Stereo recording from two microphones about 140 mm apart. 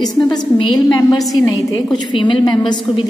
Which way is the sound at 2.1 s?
35° left (ahead or behind).